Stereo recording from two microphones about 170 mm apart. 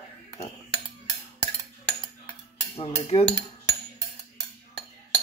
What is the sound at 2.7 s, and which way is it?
Cutlery, 35° left (ahead or behind).